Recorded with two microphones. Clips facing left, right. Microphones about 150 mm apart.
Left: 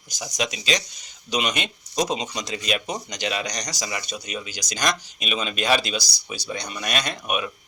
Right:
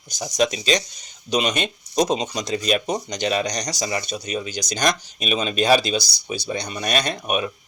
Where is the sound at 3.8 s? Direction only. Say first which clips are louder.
Right 5 dB; 35° right (ahead or behind).